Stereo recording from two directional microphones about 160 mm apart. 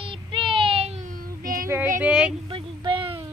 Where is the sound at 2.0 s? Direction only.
5° right (ahead or behind).